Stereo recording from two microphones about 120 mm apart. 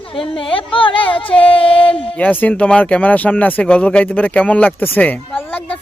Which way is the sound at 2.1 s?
15° left (ahead or behind).